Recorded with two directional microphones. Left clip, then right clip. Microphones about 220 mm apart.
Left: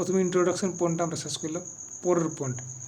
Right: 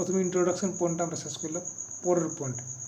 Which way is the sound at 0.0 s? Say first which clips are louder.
Left 2 dB; 15° left (ahead or behind).